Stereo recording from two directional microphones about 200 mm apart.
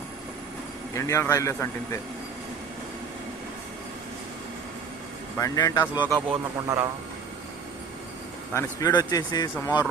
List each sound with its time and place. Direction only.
0.9 s a man's voice: 15° left (ahead or behind)
5.4 s a man's voice: 15° left (ahead or behind)
6.0 s speech: 10° right (ahead or behind)
8.5 s speech: 15° left (ahead or behind)